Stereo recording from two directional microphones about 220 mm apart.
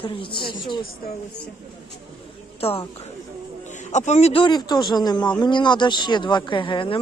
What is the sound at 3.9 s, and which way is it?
Speech, 30° left (ahead or behind).